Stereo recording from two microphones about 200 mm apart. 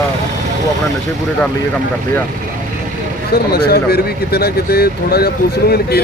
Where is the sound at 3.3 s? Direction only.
50° left (ahead or behind).